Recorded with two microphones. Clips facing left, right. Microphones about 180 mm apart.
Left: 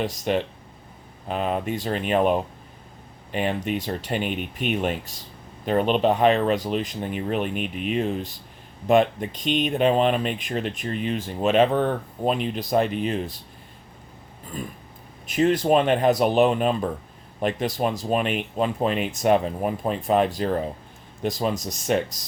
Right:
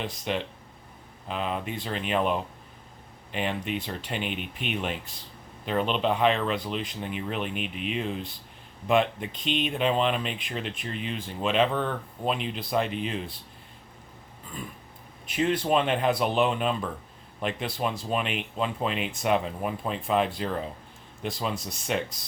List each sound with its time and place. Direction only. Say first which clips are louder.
0.0 s speech: left 6 dB; 45° left (ahead or behind)
15.3 s speech: left 5 dB; 40° left (ahead or behind)